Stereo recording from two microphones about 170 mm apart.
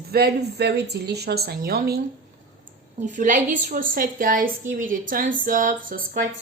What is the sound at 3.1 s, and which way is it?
A woman's voice, 50° right (ahead or behind).